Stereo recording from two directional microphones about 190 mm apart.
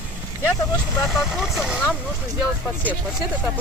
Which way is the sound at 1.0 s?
Centre (ahead or behind).